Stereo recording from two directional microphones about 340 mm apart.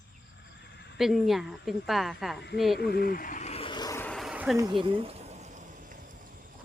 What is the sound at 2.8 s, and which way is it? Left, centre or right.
Vehicle, left.